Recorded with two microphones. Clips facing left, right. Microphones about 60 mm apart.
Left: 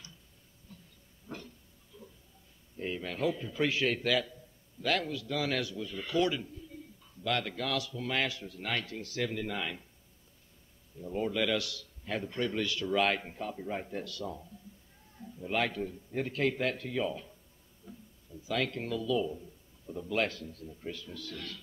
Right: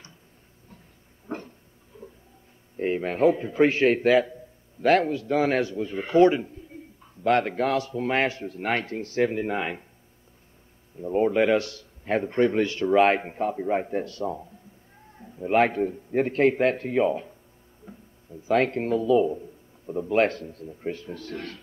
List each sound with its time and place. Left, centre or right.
1.2 s a sound: right
2.8 s a man's voice: right
11.0 s a man's voice: right